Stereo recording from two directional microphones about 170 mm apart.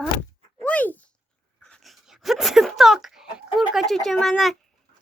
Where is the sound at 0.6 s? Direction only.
10° left (ahead or behind).